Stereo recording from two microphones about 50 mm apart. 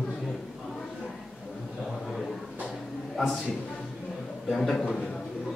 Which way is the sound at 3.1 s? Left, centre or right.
Centre.